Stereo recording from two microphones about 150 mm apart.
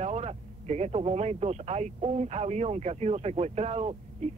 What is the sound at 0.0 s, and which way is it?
Speech, 45° right (ahead or behind).